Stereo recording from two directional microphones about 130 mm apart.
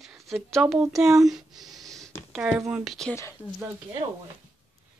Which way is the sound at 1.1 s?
25° right (ahead or behind).